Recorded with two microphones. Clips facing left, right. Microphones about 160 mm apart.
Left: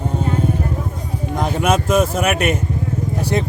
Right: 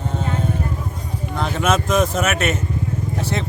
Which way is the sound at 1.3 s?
15° left (ahead or behind).